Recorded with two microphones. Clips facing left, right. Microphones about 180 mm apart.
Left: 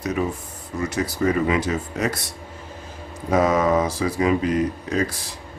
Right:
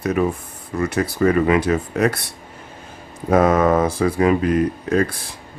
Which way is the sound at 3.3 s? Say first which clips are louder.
Right 3 dB; 55° right (ahead or behind).